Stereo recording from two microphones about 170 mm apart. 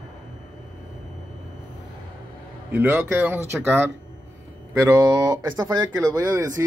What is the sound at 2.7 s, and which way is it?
Speech, 10° right (ahead or behind).